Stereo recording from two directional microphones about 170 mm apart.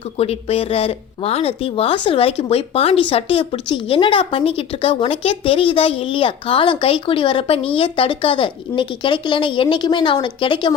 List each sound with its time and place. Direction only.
0.2 s speech: 35° left (ahead or behind)